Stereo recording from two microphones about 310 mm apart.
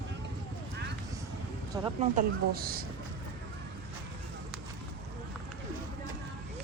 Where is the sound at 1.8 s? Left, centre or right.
Centre.